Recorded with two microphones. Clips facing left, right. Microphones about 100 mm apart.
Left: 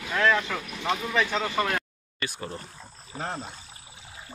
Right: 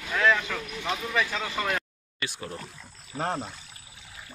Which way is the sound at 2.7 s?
35° left (ahead or behind).